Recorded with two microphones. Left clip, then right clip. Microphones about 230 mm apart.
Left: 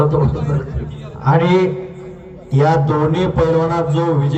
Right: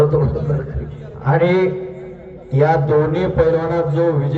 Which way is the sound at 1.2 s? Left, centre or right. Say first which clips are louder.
Left 1 dB; left.